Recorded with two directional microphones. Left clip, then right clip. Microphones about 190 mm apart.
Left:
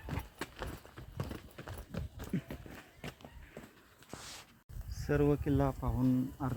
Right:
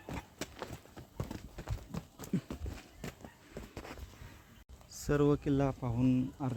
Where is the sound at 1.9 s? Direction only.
45° right (ahead or behind).